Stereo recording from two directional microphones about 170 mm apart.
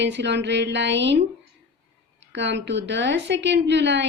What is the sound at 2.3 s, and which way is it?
A woman's voice, 90° right.